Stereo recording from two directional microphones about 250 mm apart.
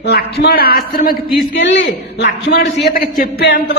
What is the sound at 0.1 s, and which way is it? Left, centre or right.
A man's voice, left.